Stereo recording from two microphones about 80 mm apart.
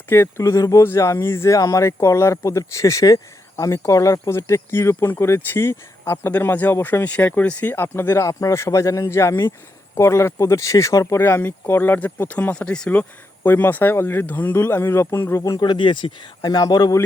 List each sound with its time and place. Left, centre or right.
0.1 s speech: left
11.2 s speech: left; by 12.9 s centre
12.9 s speech: left
15.5 s speech: left
16.4 s speech: left